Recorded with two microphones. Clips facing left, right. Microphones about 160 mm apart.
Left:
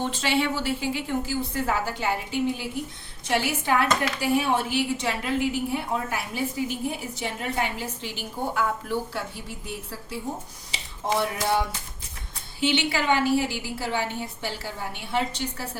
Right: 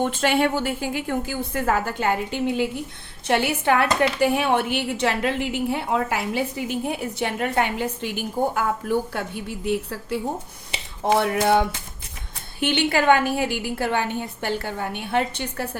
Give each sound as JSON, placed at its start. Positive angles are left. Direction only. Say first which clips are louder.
{"t": 0.0, "sound": "a woman's voice", "louder": "right 5 dB", "side_deg": -55}
{"t": 3.2, "sound": "a woman's voice", "louder": "right 4 dB", "side_deg": -60}
{"t": 5.7, "sound": "a woman's voice", "louder": "right 4 dB", "side_deg": -75}